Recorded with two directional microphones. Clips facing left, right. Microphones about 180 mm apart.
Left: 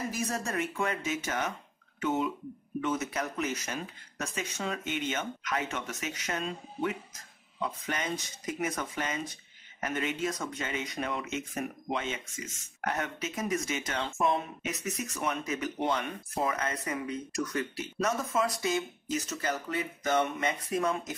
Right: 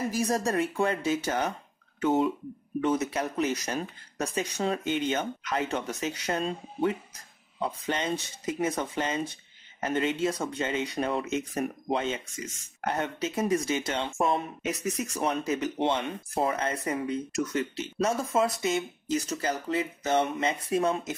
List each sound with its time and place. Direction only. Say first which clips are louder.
0.1 s speech: right 6 dB; 35° right (ahead or behind)